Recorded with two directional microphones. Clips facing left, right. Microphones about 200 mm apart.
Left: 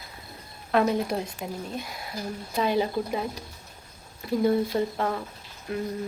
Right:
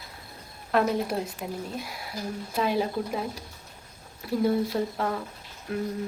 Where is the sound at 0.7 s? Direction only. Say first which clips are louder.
Left 1 dB; centre (ahead or behind).